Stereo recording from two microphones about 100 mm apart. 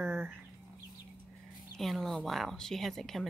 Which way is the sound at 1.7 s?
Centre (ahead or behind).